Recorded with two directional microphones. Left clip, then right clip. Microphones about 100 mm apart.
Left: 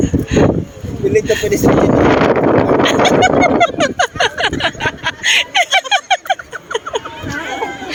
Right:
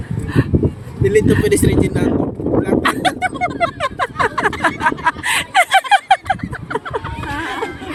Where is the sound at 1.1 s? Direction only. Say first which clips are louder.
Even; 55° right (ahead or behind).